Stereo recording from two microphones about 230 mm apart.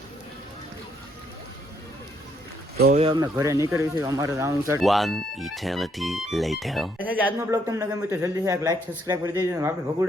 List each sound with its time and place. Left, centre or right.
2.7 s speech: right
3.0 s speech: centre
4.8 s speech: centre